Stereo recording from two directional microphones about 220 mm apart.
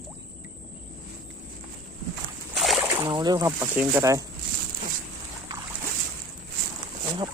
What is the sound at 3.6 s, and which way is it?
Speech, 5° right (ahead or behind).